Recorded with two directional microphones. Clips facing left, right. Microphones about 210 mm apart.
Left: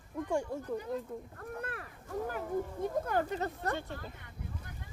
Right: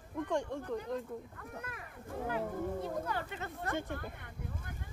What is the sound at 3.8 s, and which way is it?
Speech, 55° right (ahead or behind).